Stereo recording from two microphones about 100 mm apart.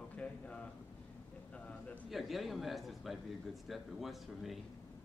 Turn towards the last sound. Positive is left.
turn(degrees=0)  # may be behind; listen again after turning